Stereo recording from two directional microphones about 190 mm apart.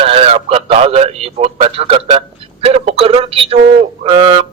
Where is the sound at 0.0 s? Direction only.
30° right (ahead or behind).